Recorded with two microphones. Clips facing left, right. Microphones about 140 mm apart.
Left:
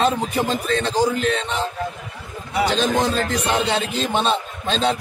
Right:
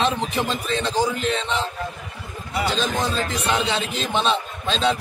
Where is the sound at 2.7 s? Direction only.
50° left (ahead or behind).